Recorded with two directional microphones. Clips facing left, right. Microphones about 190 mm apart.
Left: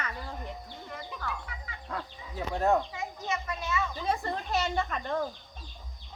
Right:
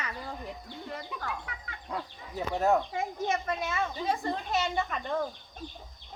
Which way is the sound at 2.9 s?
50° right (ahead or behind).